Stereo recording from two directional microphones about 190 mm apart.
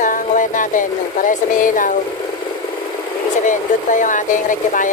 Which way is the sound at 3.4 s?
40° left (ahead or behind).